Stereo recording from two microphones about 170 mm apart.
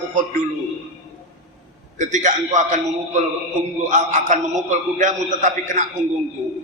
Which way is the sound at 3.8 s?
50° right (ahead or behind).